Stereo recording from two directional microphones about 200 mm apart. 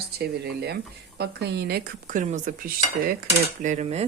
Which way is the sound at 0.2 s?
55° right (ahead or behind).